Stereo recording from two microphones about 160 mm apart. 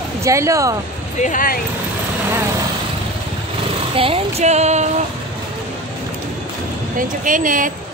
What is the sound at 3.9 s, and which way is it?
Female singing, 35° right (ahead or behind).